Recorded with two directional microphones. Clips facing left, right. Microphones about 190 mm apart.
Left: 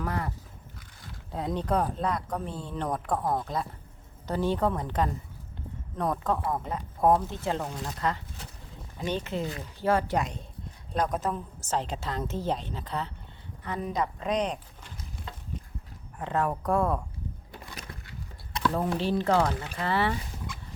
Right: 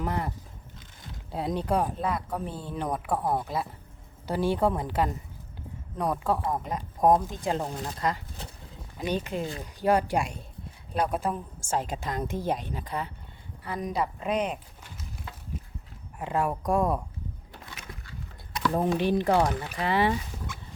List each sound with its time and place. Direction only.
0.0 s a sound: 20° right (ahead or behind)
1.3 s speech: 10° right (ahead or behind)
9.4 s speech: 30° right (ahead or behind)
9.8 s speech: 15° right (ahead or behind)
16.1 s speech: 10° right (ahead or behind)
18.6 s speech: 15° right (ahead or behind)